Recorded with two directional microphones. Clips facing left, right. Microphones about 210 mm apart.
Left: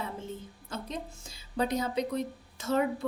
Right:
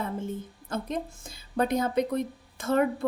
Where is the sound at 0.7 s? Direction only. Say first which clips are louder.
Right 6 dB; 55° right (ahead or behind).